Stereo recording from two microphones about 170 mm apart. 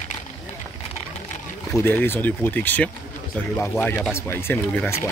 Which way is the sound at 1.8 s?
10° left (ahead or behind).